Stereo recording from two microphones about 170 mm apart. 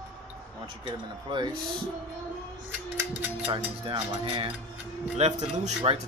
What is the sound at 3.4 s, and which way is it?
Speech, 30° right (ahead or behind).